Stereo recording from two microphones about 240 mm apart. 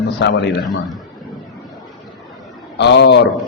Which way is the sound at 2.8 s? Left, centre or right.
Left.